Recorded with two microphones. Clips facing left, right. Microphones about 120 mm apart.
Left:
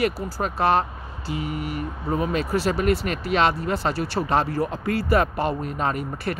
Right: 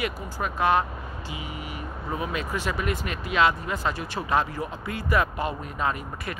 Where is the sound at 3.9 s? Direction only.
75° left (ahead or behind).